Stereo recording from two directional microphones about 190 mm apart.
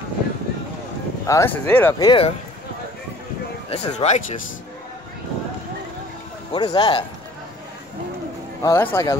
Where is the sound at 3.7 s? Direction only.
35° left (ahead or behind).